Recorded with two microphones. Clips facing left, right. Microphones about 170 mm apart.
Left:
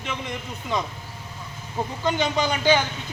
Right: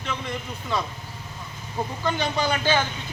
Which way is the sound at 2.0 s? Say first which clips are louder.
Left 2 dB; 20° left (ahead or behind).